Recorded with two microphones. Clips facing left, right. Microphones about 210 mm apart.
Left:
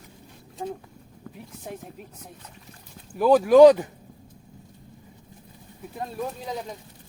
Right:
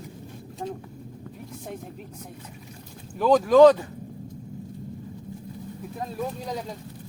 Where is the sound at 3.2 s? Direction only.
10° left (ahead or behind).